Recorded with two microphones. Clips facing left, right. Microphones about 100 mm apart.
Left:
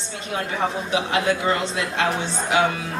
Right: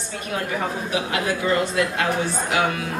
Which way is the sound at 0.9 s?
25° left (ahead or behind).